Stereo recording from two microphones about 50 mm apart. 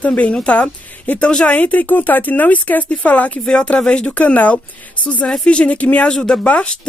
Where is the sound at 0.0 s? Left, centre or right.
Left.